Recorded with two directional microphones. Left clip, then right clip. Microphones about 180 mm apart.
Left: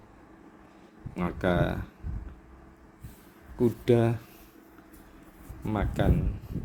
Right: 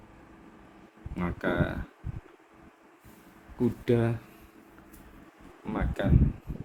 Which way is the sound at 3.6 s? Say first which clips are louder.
Left 3 dB; 35° left (ahead or behind).